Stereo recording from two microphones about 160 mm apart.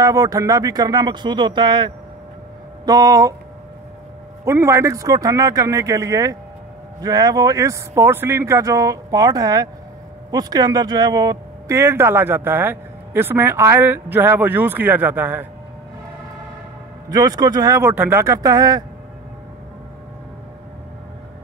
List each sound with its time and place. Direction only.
0.0 s speech: 20° right (ahead or behind)
4.5 s speech: 20° right (ahead or behind)
17.1 s speech: 25° right (ahead or behind)